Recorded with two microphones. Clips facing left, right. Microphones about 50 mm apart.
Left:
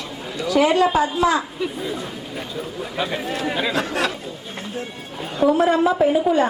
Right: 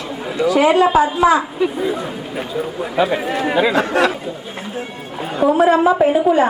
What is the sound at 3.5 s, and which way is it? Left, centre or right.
Speech, right.